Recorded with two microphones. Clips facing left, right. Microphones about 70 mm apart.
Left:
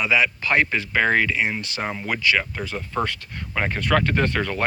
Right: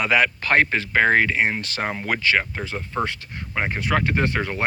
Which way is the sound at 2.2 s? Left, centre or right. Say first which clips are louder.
Left 1 dB; right.